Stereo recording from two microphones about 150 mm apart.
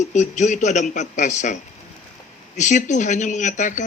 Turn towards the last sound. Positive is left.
turn(degrees=55)  # may be behind; listen again after turning